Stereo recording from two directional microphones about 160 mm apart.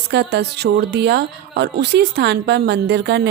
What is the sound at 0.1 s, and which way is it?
Speech, 90° right.